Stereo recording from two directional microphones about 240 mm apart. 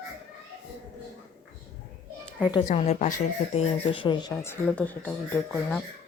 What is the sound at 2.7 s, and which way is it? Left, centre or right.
Speech, left.